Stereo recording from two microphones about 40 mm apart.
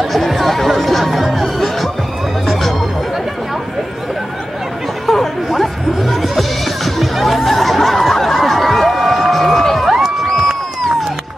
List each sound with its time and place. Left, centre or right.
0.3 s music: centre
5.0 s music: centre
9.8 s a sound: centre